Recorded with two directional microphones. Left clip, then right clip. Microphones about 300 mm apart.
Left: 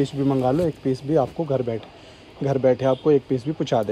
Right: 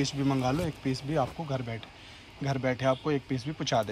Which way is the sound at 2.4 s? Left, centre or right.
Centre.